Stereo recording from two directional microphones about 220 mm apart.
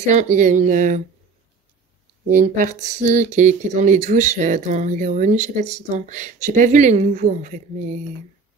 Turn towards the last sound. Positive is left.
turn(degrees=-30)  # may be behind; listen again after turning